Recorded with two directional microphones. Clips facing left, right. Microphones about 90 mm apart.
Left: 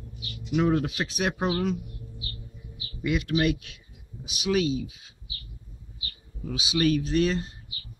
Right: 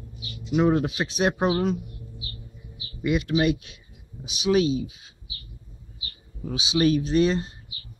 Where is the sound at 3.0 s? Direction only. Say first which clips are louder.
Right 3 dB; 20° right (ahead or behind).